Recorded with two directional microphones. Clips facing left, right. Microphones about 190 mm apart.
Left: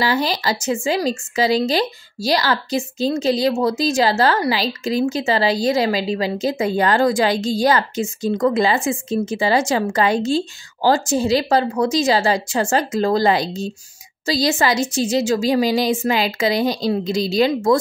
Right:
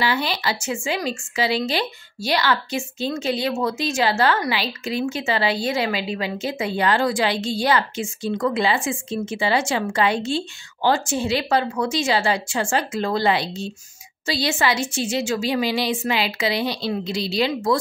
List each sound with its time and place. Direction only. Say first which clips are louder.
0.0 s speech: left 3 dB; 40° left (ahead or behind)